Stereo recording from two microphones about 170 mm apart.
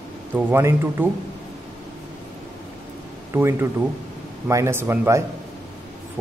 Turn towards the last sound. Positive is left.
turn(degrees=-15)  # may be behind; listen again after turning